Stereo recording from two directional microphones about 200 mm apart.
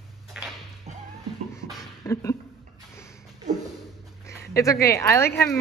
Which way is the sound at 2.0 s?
15° left (ahead or behind).